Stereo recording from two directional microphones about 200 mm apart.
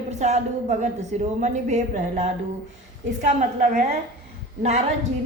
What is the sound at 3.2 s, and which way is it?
Speech, 40° right (ahead or behind).